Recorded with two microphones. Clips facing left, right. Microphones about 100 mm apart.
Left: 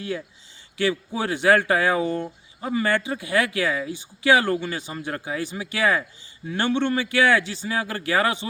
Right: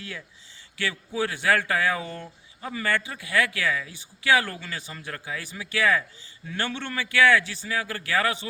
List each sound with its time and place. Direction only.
0.0 s speech: 25° left (ahead or behind)